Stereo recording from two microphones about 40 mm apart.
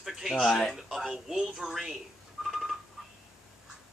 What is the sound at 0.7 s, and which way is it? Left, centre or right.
A man's voice, centre.